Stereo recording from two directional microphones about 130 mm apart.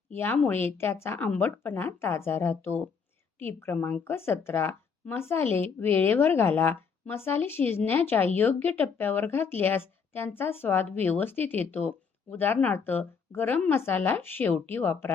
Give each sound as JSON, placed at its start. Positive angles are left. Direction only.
{"t": 0.1, "sound": "speech", "side_deg": 15}